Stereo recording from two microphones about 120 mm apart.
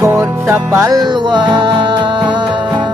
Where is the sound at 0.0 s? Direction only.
20° right (ahead or behind); by 1.8 s 40° right (ahead or behind).